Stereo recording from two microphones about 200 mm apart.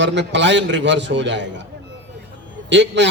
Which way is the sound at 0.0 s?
60° right (ahead or behind).